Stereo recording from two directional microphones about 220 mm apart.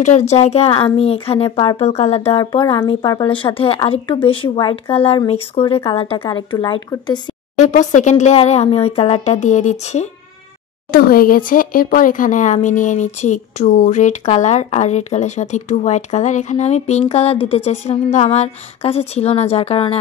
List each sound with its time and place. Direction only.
0.0 s speech: 30° left (ahead or behind)
7.6 s speech: 35° left (ahead or behind)